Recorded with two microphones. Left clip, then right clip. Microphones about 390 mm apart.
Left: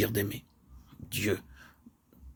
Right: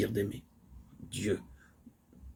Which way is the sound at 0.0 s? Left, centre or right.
Left.